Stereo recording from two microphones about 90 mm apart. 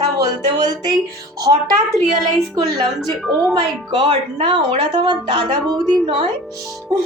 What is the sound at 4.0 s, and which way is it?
Speech, 85° right.